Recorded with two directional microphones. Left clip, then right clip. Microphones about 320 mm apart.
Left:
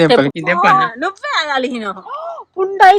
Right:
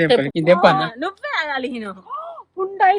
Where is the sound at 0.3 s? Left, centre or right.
Centre.